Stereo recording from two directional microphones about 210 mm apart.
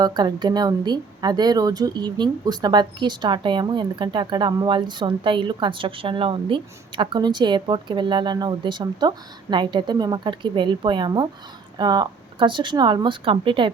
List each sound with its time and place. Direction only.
0.0 s a woman's voice: 20° right (ahead or behind)